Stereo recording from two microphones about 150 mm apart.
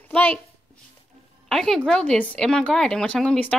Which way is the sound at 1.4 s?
Centre (ahead or behind).